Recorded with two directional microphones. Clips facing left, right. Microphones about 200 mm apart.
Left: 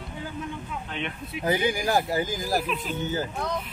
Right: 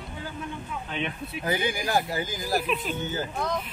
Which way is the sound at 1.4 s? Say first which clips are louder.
Left 3 dB; 35° left (ahead or behind).